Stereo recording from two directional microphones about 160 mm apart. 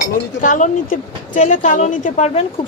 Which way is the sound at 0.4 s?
55° left (ahead or behind).